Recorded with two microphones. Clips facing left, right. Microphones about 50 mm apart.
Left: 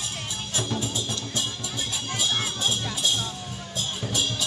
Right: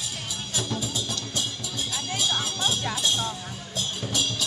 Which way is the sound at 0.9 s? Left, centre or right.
Left.